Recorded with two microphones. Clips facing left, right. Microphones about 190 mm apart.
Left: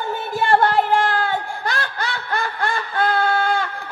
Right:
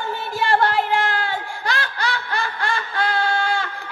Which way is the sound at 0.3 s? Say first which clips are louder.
Left 2 dB; 50° left (ahead or behind).